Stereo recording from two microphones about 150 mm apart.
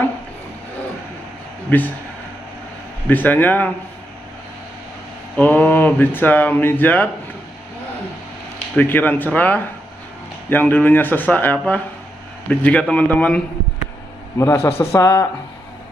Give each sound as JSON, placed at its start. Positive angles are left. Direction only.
{"t": 1.7, "sound": "speech", "side_deg": 10}
{"t": 3.1, "sound": "speech", "side_deg": 10}
{"t": 5.3, "sound": "speech", "side_deg": 10}
{"t": 8.7, "sound": "speech", "side_deg": 10}
{"t": 14.4, "sound": "speech", "side_deg": 20}